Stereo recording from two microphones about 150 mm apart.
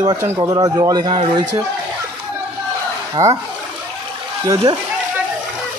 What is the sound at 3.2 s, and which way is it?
Speech, 40° right (ahead or behind).